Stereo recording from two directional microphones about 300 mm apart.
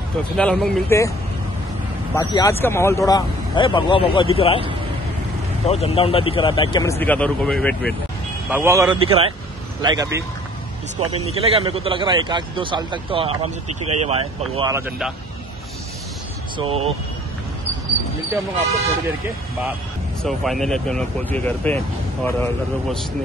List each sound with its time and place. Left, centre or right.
0.4 s speech: centre
2.1 s a man's voice: centre
5.7 s a man's voice: centre
16.5 s speech: centre
20.2 s speech: centre